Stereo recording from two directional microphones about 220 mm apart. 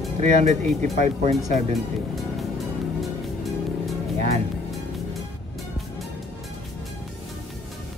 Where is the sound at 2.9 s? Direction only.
Centre (ahead or behind).